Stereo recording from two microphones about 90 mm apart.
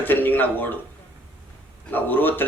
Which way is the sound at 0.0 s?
20° left (ahead or behind).